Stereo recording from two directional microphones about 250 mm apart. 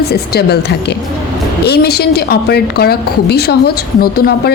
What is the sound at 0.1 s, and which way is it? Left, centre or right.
A woman's voice, left.